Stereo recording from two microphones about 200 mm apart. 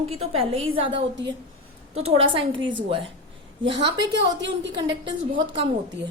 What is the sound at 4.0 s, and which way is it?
Speech, 60° right (ahead or behind).